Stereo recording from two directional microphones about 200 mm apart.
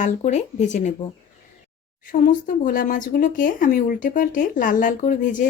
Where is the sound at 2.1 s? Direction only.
40° left (ahead or behind).